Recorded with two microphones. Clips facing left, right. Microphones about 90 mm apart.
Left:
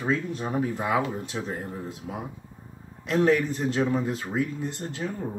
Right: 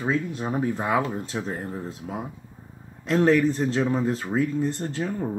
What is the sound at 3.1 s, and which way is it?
Speech, 35° right (ahead or behind).